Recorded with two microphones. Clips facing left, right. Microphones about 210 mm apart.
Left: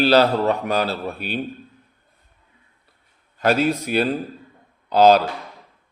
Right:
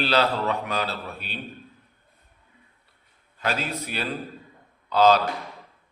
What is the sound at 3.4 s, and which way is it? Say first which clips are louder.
Speech: left 10 dB; 50° left (ahead or behind).